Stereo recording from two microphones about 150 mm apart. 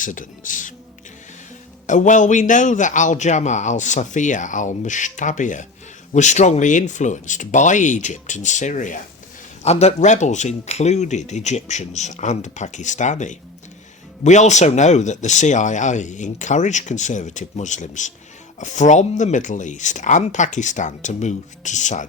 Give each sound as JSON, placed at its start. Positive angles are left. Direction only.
{"t": 0.0, "sound": "a man's voice", "side_deg": 60}
{"t": 1.9, "sound": "a man's voice", "side_deg": 55}
{"t": 9.6, "sound": "a man's voice", "side_deg": 45}